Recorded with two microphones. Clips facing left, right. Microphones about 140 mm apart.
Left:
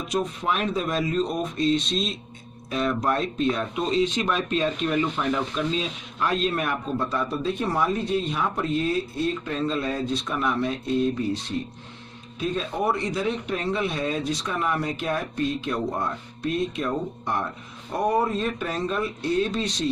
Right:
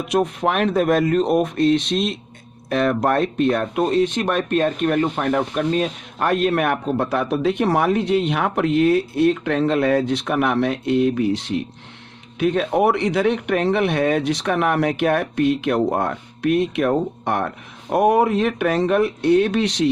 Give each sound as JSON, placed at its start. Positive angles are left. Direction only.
{"t": 0.1, "sound": "speech", "side_deg": -60}
{"t": 12.4, "sound": "speech", "side_deg": -70}